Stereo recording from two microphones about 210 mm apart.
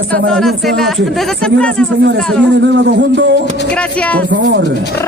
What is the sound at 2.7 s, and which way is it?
Speech, 55° right (ahead or behind).